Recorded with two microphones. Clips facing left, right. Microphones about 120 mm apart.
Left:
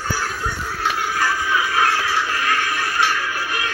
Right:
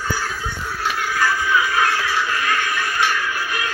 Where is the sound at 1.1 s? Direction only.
35° left (ahead or behind).